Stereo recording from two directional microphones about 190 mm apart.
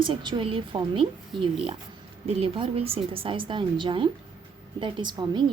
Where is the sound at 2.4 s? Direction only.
30° right (ahead or behind).